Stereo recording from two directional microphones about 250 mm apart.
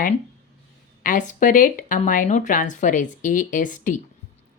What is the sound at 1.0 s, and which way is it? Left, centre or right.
Speech, left.